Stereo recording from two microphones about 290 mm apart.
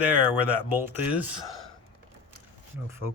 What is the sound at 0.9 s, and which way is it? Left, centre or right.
Speech, centre.